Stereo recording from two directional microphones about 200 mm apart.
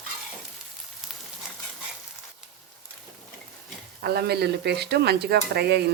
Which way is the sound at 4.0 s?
55° right (ahead or behind).